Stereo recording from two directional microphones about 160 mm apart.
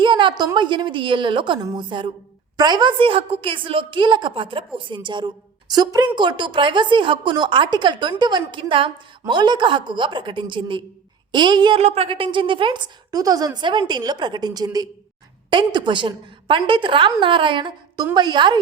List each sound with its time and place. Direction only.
0.0 s a woman's voice: 30° right (ahead or behind)
11.8 s a woman's voice: 40° right (ahead or behind)